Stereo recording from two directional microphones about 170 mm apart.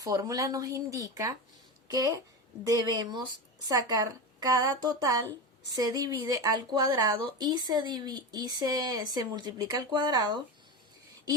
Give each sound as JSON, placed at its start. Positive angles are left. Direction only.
{"t": 0.0, "sound": "a woman's voice", "side_deg": -20}